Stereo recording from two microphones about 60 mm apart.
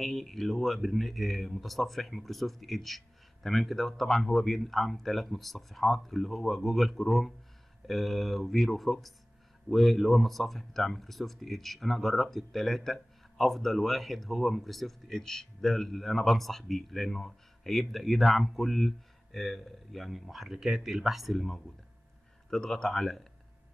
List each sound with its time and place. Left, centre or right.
0.0 s speech: centre